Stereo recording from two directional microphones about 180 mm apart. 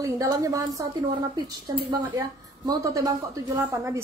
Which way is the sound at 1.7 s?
20° right (ahead or behind).